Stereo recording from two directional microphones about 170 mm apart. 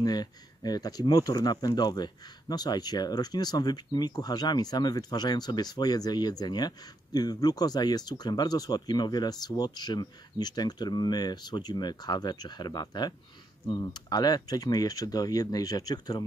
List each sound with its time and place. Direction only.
0.0 s speech: 25° left (ahead or behind)